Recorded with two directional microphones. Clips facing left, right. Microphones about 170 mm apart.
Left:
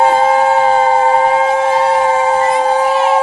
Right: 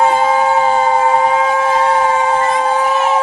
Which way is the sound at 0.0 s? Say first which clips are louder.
Left 2 dB; 35° left (ahead or behind).